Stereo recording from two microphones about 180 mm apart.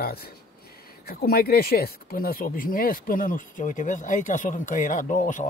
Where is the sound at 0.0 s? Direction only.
60° left (ahead or behind).